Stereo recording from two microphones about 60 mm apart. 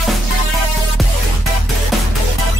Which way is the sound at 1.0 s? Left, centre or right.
Centre.